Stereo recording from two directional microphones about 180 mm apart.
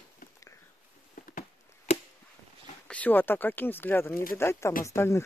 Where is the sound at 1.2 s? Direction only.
45° left (ahead or behind).